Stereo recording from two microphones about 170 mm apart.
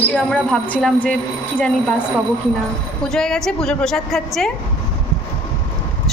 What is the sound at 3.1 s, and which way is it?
A woman's voice, 5° left (ahead or behind).